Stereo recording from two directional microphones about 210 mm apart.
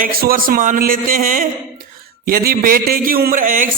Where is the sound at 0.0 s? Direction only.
45° right (ahead or behind).